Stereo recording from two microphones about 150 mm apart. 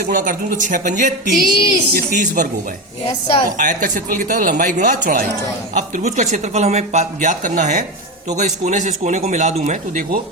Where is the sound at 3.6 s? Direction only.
60° right (ahead or behind).